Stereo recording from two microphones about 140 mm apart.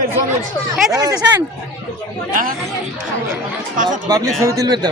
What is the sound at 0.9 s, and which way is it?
Speech, 25° right (ahead or behind).